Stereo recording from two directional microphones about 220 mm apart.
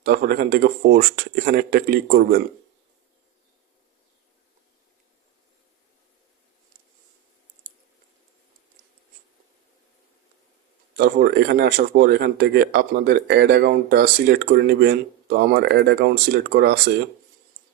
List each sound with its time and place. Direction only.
0.0 s speech: 45° right (ahead or behind)
10.9 s speech: 45° right (ahead or behind)